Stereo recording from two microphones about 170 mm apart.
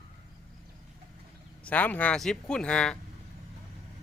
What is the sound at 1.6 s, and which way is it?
Speech, 10° left (ahead or behind).